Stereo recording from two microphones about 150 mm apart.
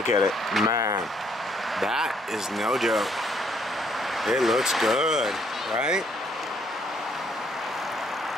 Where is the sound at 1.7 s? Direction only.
Centre (ahead or behind).